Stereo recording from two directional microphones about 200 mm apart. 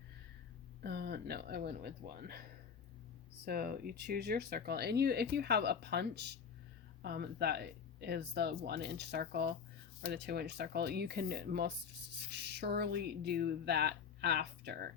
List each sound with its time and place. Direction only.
0.8 s speech: 55° right (ahead or behind)
3.4 s speech: 50° right (ahead or behind)